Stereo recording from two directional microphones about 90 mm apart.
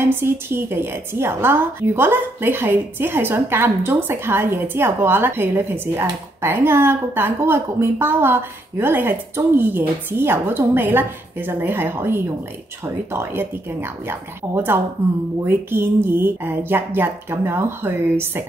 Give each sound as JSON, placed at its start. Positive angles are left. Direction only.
{"t": 0.1, "sound": "a woman's voice", "side_deg": -25}